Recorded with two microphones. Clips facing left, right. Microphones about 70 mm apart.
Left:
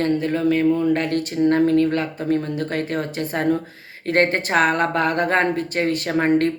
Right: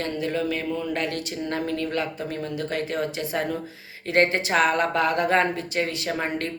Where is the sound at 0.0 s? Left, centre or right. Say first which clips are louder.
Left 6 dB; left.